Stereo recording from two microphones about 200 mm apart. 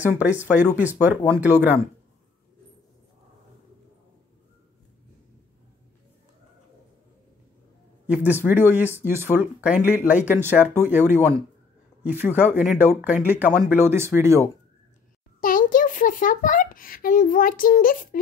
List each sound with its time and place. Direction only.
0.0 s speech: 5° right (ahead or behind)
8.1 s speech: 10° right (ahead or behind)
15.4 s a sound: 45° left (ahead or behind)